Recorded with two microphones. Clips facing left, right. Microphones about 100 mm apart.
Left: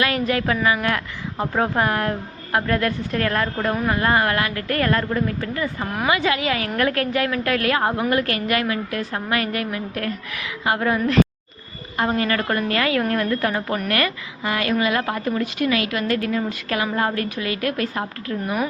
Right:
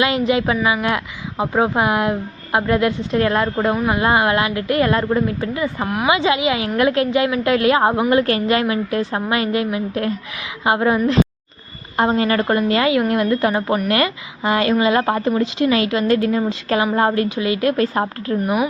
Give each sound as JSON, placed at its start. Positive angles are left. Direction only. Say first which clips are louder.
{"t": 0.0, "sound": "speech", "louder": "right 4 dB", "side_deg": -20}